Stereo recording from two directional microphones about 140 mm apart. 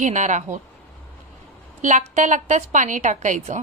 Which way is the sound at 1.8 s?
60° right (ahead or behind).